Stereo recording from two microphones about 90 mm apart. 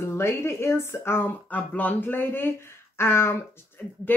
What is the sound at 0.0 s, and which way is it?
Speech, 30° left (ahead or behind).